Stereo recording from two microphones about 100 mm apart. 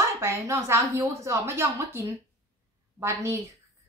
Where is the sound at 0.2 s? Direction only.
30° right (ahead or behind).